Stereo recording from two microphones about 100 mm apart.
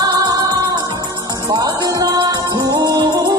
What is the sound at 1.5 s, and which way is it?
Music, 40° right (ahead or behind).